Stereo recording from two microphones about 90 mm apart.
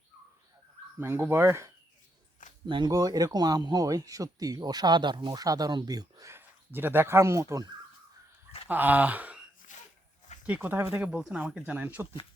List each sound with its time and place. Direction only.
0.9 s speech: 25° right (ahead or behind)
2.6 s speech: 60° right (ahead or behind)
2.9 s speech: 40° right (ahead or behind)
6.3 s speech: 25° right (ahead or behind)
8.6 s speech: 20° right (ahead or behind)
10.4 s speech: 20° right (ahead or behind)